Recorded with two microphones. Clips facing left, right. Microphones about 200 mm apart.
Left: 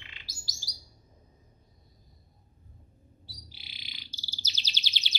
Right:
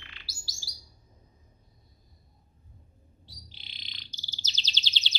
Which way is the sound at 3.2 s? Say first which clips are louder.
Even; 10° left (ahead or behind).